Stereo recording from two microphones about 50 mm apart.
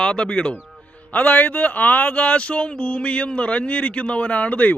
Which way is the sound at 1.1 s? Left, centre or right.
Left.